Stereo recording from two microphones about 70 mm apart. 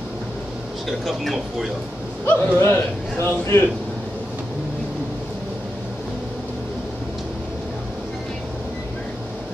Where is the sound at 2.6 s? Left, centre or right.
Left.